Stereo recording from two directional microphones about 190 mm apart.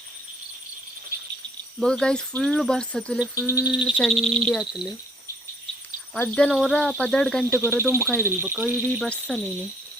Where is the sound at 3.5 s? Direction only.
15° left (ahead or behind).